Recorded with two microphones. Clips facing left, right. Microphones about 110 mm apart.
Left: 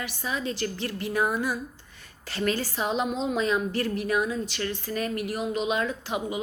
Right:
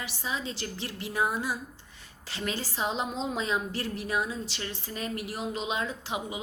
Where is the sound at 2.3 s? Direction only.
20° right (ahead or behind).